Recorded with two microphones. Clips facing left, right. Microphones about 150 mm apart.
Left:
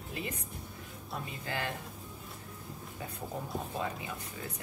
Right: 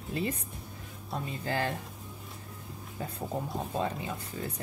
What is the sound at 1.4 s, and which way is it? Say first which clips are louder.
Speech: right 6 dB; 35° right (ahead or behind).